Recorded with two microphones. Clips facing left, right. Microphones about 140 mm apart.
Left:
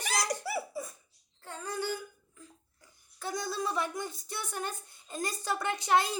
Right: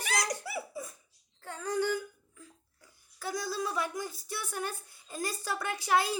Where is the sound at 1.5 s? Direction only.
15° right (ahead or behind).